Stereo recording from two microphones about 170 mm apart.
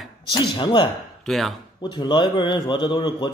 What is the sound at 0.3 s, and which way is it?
Speech, 25° left (ahead or behind).